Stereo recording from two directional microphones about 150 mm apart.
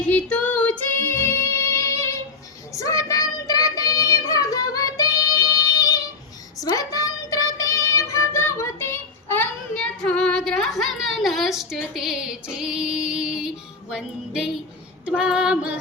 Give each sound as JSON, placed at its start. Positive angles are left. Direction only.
{"t": 0.1, "sound": "music", "side_deg": 10}
{"t": 2.7, "sound": "child singing", "side_deg": 20}
{"t": 6.6, "sound": "child singing", "side_deg": 25}
{"t": 13.9, "sound": "music", "side_deg": -5}
{"t": 15.0, "sound": "female singing", "side_deg": -5}